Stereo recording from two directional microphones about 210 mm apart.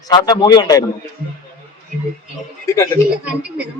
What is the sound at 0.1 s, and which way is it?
Speech, 20° left (ahead or behind).